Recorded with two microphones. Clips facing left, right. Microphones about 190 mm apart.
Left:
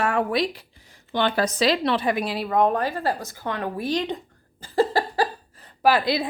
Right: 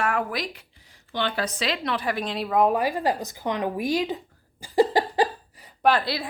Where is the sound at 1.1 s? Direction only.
45° left (ahead or behind); by 2.2 s 25° left (ahead or behind).